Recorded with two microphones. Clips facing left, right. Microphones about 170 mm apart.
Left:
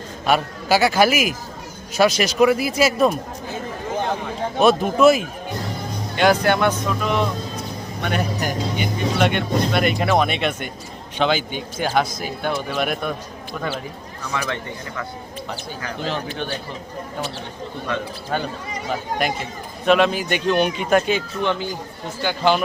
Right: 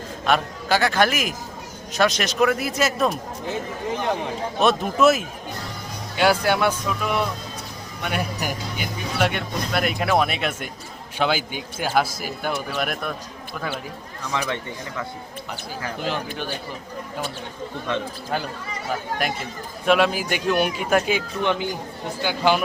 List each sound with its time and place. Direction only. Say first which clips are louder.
0.3 s a man's voice: left 2 dB; 5° left (ahead or behind)
4.6 s speech: left 4 dB; centre (ahead or behind)
14.3 s speech: even; 20° right (ahead or behind)
16.0 s speech: left 2 dB; 10° right (ahead or behind)
19.2 s speech: left 3 dB; centre (ahead or behind)